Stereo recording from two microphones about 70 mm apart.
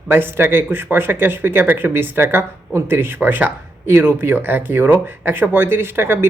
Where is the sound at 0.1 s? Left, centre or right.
Right.